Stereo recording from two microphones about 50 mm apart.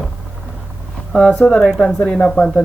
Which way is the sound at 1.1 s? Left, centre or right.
Centre.